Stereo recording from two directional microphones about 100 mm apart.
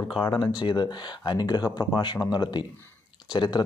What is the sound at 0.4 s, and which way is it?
Speech, 50° left (ahead or behind).